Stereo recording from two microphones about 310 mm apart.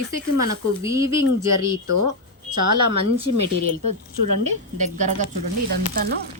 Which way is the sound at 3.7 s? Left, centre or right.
Right.